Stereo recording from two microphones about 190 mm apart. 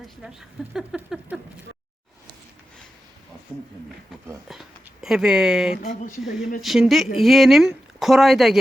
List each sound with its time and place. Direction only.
0.0 s speech: 5° right (ahead or behind)
3.5 s speech: 10° right (ahead or behind)